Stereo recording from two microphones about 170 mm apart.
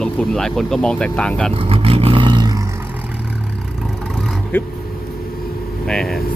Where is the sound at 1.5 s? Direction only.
35° right (ahead or behind).